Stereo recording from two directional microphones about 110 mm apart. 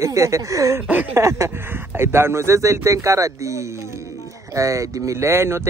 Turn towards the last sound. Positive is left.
turn(degrees=-25)  # may be behind; listen again after turning